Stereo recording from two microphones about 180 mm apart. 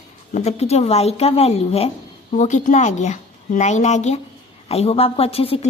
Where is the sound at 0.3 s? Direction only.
35° left (ahead or behind).